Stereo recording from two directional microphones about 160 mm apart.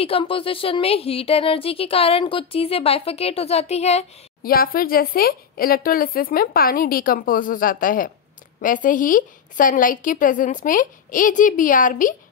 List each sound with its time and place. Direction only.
0.0 s speech: 35° left (ahead or behind)
4.4 s speech: 65° left (ahead or behind)